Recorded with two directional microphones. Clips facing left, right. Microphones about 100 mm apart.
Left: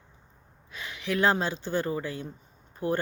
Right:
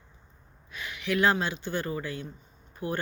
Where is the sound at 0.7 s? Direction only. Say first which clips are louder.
Right 1 dB; 25° left (ahead or behind).